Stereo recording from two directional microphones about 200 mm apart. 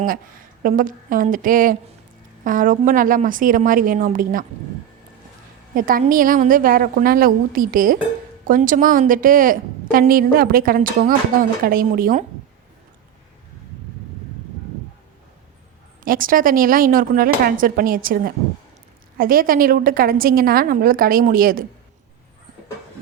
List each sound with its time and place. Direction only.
0.0 s a woman's voice: 45° right (ahead or behind)
5.7 s a woman's voice: 45° right (ahead or behind)
16.0 s a woman's voice: 45° right (ahead or behind)